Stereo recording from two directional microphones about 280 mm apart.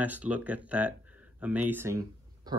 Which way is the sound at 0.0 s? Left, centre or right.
Centre.